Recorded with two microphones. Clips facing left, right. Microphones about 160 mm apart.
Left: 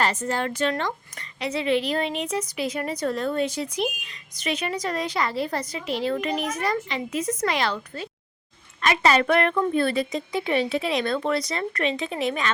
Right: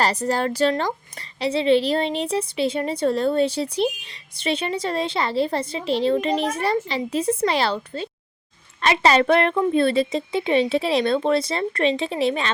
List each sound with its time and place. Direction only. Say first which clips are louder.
0.0 s a woman's voice: right 3 dB; 35° right (ahead or behind)